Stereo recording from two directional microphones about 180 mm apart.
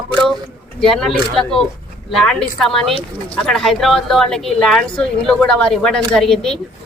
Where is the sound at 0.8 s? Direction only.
5° left (ahead or behind).